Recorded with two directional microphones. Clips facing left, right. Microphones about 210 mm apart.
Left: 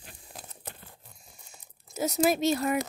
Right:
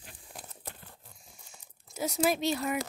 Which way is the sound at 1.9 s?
40° left (ahead or behind).